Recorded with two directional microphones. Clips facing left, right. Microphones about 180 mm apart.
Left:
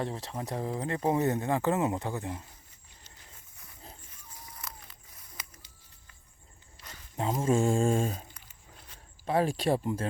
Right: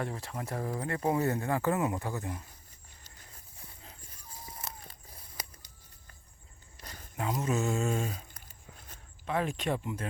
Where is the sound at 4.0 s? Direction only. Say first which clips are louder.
Right 2 dB; 35° right (ahead or behind).